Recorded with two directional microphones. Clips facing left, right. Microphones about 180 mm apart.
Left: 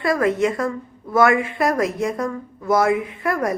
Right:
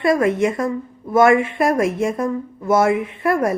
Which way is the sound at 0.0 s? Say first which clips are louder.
Right 2 dB; 25° right (ahead or behind).